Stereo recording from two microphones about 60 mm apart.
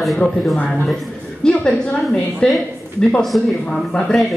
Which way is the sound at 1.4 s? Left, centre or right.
Centre.